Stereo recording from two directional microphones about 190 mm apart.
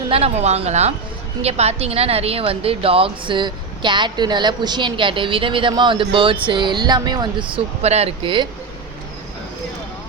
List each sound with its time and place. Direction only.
0.1 s a woman's voice: 35° right (ahead or behind)